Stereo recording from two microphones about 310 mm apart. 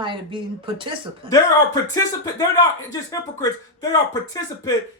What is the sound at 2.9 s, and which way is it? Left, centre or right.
Speech, centre.